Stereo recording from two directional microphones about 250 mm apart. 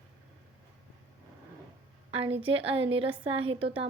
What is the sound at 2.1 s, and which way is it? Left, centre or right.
A woman's voice, right.